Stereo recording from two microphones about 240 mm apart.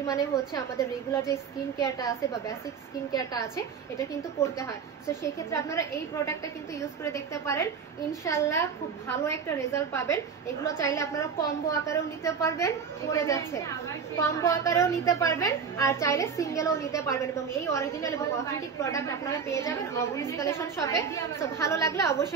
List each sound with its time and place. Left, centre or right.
0.7 s a woman's voice: centre